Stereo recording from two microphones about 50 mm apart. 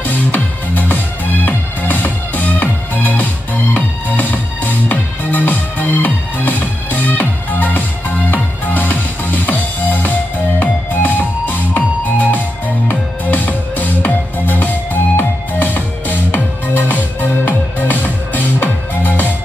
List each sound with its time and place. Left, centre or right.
0.0 s music: left